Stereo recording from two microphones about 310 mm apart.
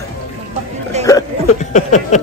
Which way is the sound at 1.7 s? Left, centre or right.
Left.